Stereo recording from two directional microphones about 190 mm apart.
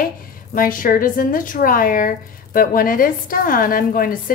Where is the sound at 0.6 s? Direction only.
45° left (ahead or behind).